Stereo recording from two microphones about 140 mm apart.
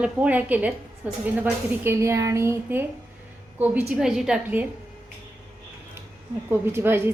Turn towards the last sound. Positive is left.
turn(degrees=-15)  # may be behind; listen again after turning